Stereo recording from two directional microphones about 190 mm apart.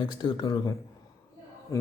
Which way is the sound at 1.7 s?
15° left (ahead or behind).